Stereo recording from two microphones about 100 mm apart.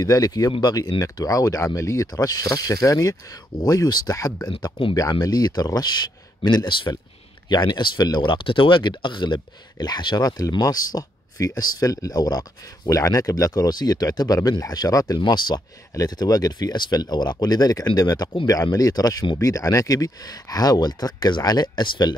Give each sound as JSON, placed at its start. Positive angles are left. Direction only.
{"t": 0.0, "sound": "speech", "side_deg": 40}
{"t": 4.5, "sound": "speech", "side_deg": 50}
{"t": 5.2, "sound": "speech", "side_deg": 40}